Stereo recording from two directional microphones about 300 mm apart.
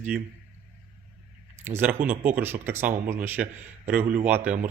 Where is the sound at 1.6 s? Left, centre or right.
Centre.